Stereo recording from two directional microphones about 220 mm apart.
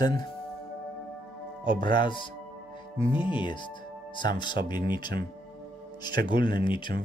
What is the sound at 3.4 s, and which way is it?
Speech, 20° left (ahead or behind).